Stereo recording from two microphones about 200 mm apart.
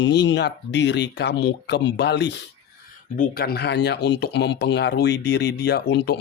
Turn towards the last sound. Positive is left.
turn(degrees=55)  # may be behind; listen again after turning